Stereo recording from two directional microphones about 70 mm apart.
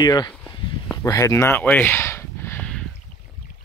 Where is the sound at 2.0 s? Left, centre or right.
Left.